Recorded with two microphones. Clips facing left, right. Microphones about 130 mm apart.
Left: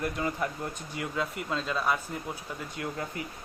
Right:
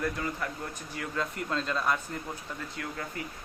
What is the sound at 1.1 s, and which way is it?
Speech, 5° left (ahead or behind).